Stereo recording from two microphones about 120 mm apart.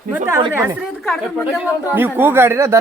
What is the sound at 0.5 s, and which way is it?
Speech, 20° right (ahead or behind).